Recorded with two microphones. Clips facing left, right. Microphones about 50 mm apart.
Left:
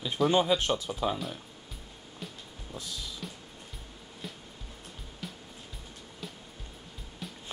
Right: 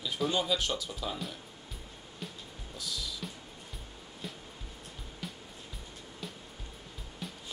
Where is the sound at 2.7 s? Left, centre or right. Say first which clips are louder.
Even; left.